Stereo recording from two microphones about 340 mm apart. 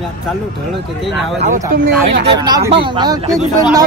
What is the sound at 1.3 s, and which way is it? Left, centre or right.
Speech, right.